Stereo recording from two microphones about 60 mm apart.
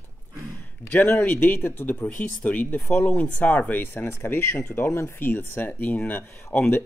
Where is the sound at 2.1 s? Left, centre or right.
Left.